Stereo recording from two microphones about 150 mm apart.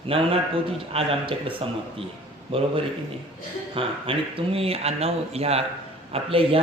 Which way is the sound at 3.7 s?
35° right (ahead or behind).